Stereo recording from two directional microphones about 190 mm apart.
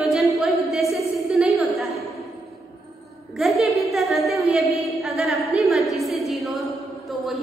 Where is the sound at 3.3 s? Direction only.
Centre (ahead or behind).